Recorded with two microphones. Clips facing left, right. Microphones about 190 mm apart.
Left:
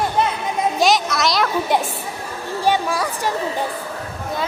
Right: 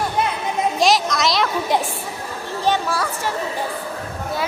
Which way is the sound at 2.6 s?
10° left (ahead or behind).